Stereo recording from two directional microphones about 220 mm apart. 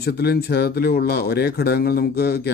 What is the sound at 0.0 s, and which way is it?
Speech, 45° left (ahead or behind).